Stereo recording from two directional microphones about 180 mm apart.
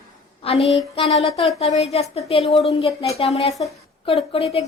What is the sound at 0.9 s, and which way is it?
A woman's voice, 35° left (ahead or behind).